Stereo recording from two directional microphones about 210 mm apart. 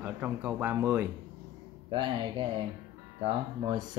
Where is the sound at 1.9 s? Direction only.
25° right (ahead or behind).